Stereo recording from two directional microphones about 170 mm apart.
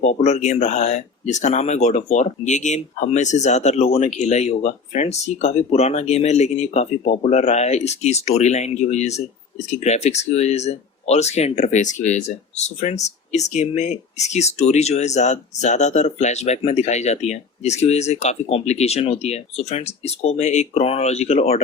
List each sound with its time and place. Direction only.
0.0 s speech: 40° left (ahead or behind)